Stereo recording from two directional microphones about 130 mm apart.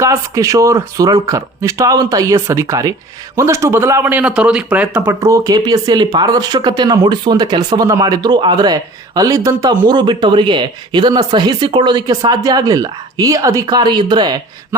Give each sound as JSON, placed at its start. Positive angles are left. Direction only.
{"t": 0.0, "sound": "a man's voice", "side_deg": -25}